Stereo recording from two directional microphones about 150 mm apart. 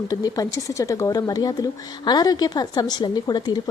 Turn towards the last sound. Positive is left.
turn(degrees=25)  # may be behind; listen again after turning